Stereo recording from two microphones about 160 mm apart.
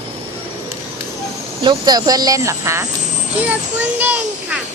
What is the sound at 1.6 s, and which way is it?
A child's voice, 25° right (ahead or behind).